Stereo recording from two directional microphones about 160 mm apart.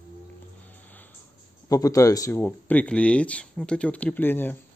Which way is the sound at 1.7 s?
20° left (ahead or behind).